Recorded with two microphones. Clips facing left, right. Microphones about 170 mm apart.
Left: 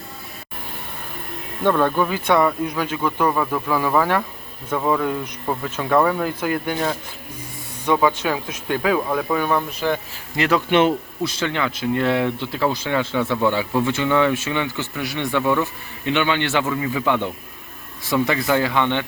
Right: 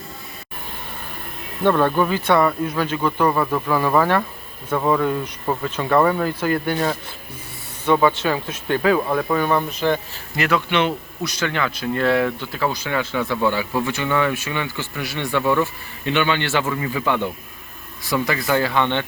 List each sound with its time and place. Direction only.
1.6 s speech: 5° right (ahead or behind)
2.0 s speech: 10° left (ahead or behind)
8.0 s speech: 10° left (ahead or behind)
10.3 s speech: 30° left (ahead or behind)
10.7 s speech: 45° left (ahead or behind)
11.3 s speech: 20° left (ahead or behind)
18.0 s speech: 25° left (ahead or behind)